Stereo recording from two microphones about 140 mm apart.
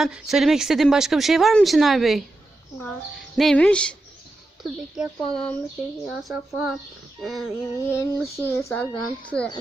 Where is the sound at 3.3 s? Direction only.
5° left (ahead or behind).